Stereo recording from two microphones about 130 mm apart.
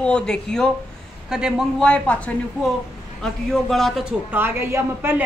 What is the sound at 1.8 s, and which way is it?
A woman's voice, 10° left (ahead or behind).